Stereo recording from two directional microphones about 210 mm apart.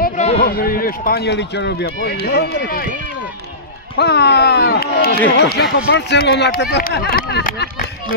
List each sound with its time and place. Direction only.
0.0 s a sound: 30° left (ahead or behind)
0.5 s speech: 45° left (ahead or behind)
4.0 s speech: 50° left (ahead or behind)